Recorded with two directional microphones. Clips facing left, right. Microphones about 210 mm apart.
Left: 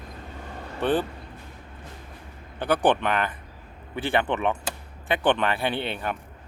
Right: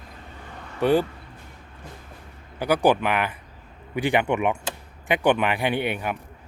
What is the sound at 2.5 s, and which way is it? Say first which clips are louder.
A man's voice: right 2 dB; 10° right (ahead or behind).